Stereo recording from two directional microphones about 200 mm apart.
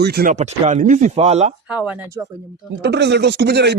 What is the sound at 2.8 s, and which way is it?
Speech, 60° right (ahead or behind).